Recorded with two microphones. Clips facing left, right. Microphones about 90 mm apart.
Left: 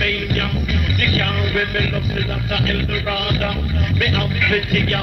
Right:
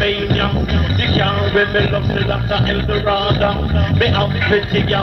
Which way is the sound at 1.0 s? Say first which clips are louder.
Right 5 dB; 40° right (ahead or behind).